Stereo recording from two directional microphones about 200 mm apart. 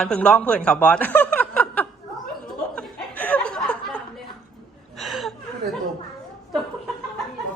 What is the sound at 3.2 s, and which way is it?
Chuckle, 5° left (ahead or behind).